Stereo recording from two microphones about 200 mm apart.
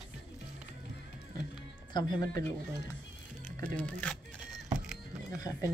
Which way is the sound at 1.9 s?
20° left (ahead or behind).